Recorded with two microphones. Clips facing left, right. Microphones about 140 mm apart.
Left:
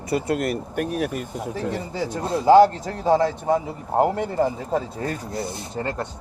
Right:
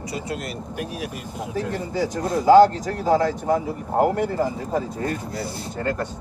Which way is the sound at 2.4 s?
25° left (ahead or behind).